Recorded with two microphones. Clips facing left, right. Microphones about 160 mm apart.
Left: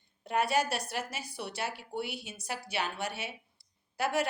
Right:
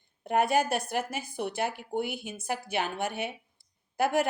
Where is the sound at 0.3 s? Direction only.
50° right (ahead or behind).